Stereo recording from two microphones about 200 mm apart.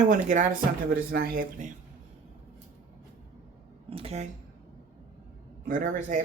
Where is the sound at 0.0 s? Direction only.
40° right (ahead or behind).